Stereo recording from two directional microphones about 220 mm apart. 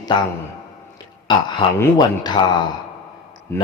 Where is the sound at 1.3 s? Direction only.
20° left (ahead or behind).